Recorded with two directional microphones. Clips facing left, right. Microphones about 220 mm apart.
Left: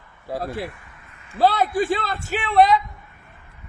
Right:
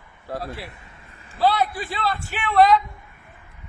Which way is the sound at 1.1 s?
35° right (ahead or behind).